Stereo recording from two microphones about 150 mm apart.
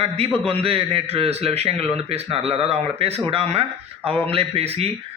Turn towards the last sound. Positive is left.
turn(degrees=-40)  # may be behind; listen again after turning